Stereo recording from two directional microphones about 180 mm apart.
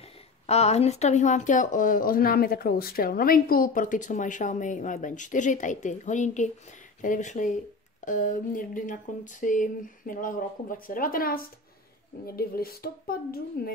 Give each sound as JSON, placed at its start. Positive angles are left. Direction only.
{"t": 0.5, "sound": "a woman's voice", "side_deg": 35}